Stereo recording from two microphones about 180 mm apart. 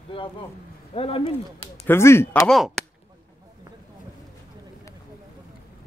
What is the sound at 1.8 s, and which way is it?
Speech, 15° left (ahead or behind).